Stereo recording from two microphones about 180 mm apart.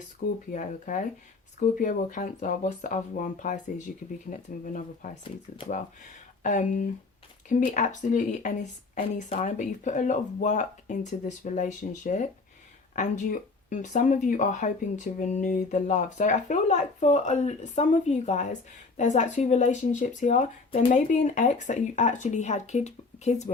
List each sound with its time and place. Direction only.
0.5 s speech: 45° left (ahead or behind)
6.4 s speech: 45° left (ahead or behind)